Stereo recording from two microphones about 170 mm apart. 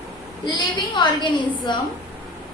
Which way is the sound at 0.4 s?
25° left (ahead or behind).